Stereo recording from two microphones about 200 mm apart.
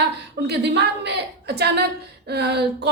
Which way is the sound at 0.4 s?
60° right (ahead or behind).